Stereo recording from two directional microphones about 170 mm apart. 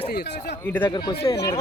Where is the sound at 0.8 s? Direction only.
25° left (ahead or behind).